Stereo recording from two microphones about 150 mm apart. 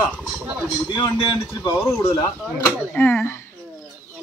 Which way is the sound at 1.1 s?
35° left (ahead or behind).